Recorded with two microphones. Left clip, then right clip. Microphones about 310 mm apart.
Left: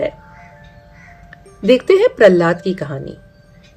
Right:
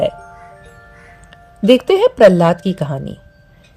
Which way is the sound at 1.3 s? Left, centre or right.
Right.